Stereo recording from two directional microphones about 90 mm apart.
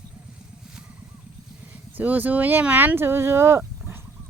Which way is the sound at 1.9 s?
20° right (ahead or behind).